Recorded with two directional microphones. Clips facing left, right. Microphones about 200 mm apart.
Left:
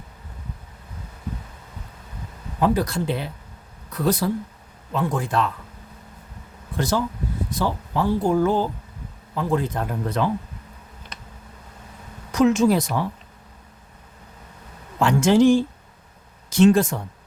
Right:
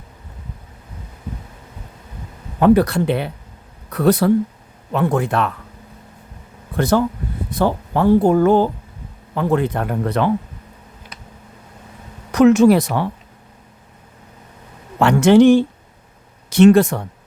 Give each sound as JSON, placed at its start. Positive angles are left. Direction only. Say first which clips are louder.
{"t": 2.6, "sound": "speech", "louder": "right 8 dB", "side_deg": -65}
{"t": 6.7, "sound": "speech", "louder": "right 7 dB", "side_deg": -60}
{"t": 12.3, "sound": "speech", "louder": "right 7 dB", "side_deg": -65}
{"t": 14.9, "sound": "speech", "louder": "right 6 dB", "side_deg": -65}